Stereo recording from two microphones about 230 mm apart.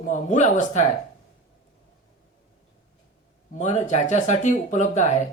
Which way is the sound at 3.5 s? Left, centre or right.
Left.